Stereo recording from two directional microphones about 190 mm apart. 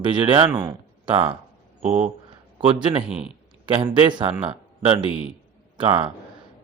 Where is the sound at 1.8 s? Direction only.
35° right (ahead or behind).